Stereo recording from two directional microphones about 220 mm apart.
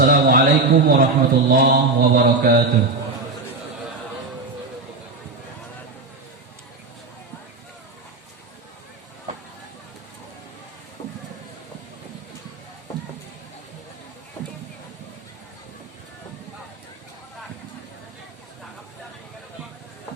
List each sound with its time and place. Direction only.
0.0 s a man's voice: 40° right (ahead or behind)